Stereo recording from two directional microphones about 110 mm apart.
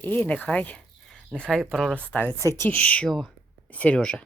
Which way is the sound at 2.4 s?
25° left (ahead or behind).